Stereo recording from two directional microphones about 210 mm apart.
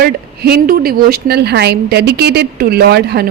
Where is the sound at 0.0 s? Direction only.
45° right (ahead or behind).